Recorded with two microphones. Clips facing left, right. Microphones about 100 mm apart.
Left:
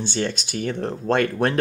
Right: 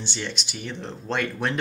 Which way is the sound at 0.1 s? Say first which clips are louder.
Left 8 dB; 50° left (ahead or behind).